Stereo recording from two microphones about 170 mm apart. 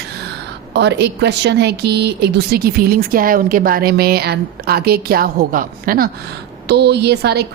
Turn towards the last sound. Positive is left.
turn(degrees=-75)  # may be behind; listen again after turning